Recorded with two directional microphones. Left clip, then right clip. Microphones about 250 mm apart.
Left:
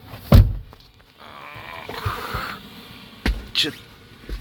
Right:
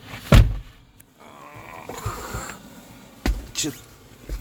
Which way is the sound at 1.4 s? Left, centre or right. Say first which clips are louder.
Left 4 dB; centre.